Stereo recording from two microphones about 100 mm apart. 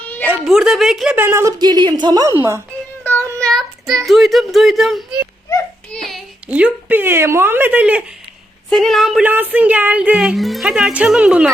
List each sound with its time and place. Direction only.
0.4 s speech: 5° right (ahead or behind)
1.1 s speech: 20° right (ahead or behind)
1.5 s a woman's voice: 45° right (ahead or behind)
3.0 s child singing: 15° left (ahead or behind)
3.4 s speech: centre (ahead or behind)
5.9 s child singing: 5° left (ahead or behind)
6.5 s speech: 15° right (ahead or behind)
8.7 s speech: centre (ahead or behind)
9.2 s speech: 15° right (ahead or behind)